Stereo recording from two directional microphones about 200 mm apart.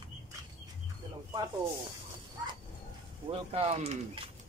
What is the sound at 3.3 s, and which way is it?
Speech, 30° right (ahead or behind).